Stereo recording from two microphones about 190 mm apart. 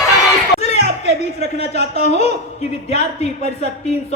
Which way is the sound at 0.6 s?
35° left (ahead or behind).